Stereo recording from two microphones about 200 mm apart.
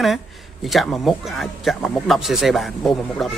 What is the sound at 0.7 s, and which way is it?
Speech, centre (ahead or behind).